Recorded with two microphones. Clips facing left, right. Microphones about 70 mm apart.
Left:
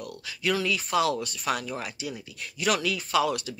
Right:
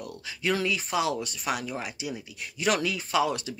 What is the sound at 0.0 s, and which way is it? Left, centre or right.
Speech, right.